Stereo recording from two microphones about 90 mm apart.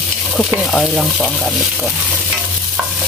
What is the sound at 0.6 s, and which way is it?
Stir, 10° left (ahead or behind).